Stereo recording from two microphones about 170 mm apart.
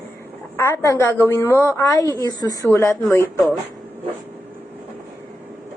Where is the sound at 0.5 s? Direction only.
15° left (ahead or behind).